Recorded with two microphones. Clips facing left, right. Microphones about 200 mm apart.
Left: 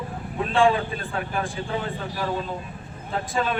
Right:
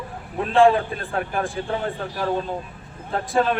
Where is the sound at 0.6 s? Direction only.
50° right (ahead or behind).